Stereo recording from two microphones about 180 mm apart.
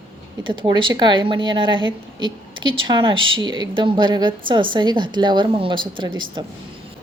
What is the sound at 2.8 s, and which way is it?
A woman's voice, 25° right (ahead or behind).